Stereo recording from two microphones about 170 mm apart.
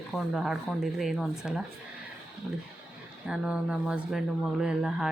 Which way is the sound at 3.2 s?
5° right (ahead or behind).